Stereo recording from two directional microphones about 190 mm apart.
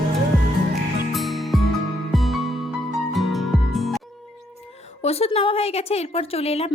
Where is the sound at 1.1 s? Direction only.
Centre (ahead or behind).